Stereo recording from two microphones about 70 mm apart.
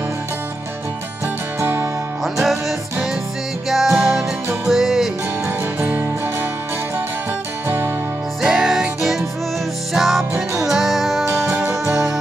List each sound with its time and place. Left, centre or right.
1.6 s music: right
2.2 s music: centre
3.6 s music: centre
5.8 s music: right
7.6 s music: right
8.4 s music: centre